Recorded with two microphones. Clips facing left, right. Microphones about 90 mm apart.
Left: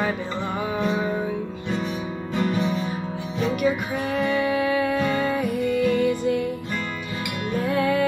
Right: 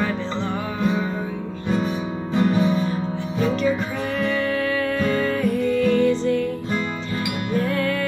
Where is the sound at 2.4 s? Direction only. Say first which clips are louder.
Right 4 dB; 35° right (ahead or behind).